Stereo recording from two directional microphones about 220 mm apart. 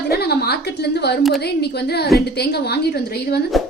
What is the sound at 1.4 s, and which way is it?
A woman's voice, 45° left (ahead or behind).